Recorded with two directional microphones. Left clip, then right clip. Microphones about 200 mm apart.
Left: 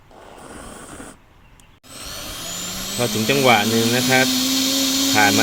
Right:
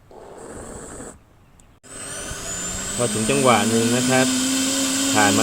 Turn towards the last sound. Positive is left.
turn(degrees=10)  # may be behind; listen again after turning